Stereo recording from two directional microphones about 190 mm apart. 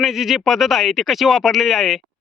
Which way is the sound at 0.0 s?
Centre (ahead or behind).